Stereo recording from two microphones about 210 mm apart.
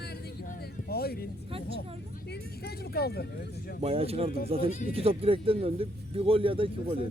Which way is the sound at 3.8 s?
30° right (ahead or behind).